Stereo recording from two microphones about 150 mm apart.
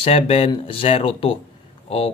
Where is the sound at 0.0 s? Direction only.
40° left (ahead or behind).